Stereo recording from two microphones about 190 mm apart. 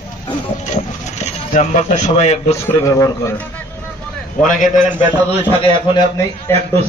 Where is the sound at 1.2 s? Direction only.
35° left (ahead or behind).